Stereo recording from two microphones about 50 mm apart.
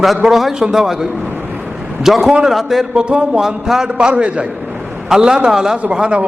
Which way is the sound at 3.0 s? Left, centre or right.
Centre.